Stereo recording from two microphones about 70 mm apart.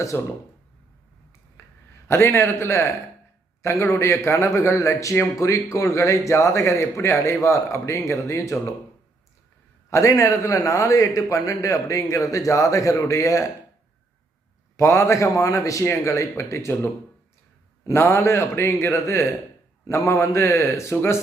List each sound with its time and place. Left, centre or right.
0.1 s a man's voice: left
1.6 s a sound: left
2.0 s a man's voice: left
9.9 s a man's voice: left
14.8 s a man's voice: left
15.8 s a man's voice: left